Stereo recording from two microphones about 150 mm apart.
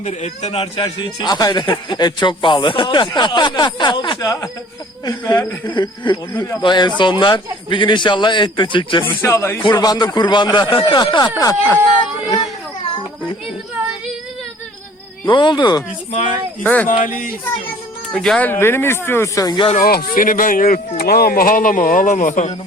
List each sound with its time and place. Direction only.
0.0 s a man's voice: 50° left (ahead or behind)
0.8 s a man's voice: 30° left (ahead or behind)
5.6 s speech: 30° left (ahead or behind)
9.0 s speech: 15° left (ahead or behind)
9.6 s a man's voice: 25° left (ahead or behind)
15.3 s speech: 30° left (ahead or behind)
16.6 s speech: 10° left (ahead or behind)
16.9 s speech: 60° left (ahead or behind)
18.1 s speech: 5° left (ahead or behind); by 19.6 s 25° left (ahead or behind)
19.7 s speech: 80° left; by 22.5 s 60° left (ahead or behind)